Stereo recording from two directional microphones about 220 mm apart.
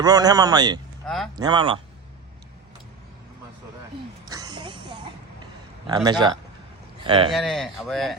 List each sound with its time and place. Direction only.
0.0 s a man's voice: 15° right (ahead or behind)
1.0 s speech: centre (ahead or behind)
1.4 s speech: 20° right (ahead or behind)
4.3 s a sound: 15° right (ahead or behind)
5.9 s speech: 20° right (ahead or behind)
7.3 s speech: centre (ahead or behind)